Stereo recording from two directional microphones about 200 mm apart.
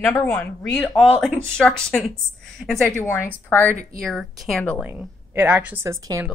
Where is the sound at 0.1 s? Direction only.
10° left (ahead or behind).